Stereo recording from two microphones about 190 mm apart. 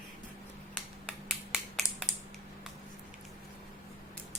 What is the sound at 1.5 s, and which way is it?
Finger snapping, centre (ahead or behind).